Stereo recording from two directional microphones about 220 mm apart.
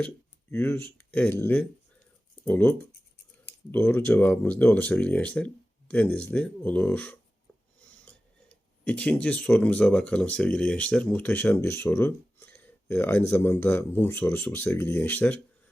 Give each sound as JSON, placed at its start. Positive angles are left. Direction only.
{"t": 0.5, "sound": "speech", "side_deg": 10}